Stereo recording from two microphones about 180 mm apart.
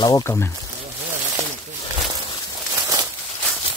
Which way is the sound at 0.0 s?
20° left (ahead or behind).